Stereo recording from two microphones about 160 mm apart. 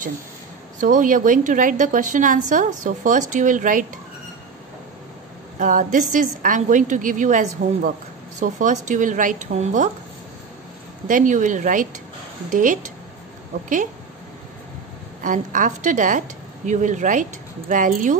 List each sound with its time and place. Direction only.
0.7 s a woman's voice: 55° right (ahead or behind)
5.6 s a woman's voice: 55° right (ahead or behind)
11.1 s a woman's voice: 55° right (ahead or behind)
15.2 s a woman's voice: 55° right (ahead or behind)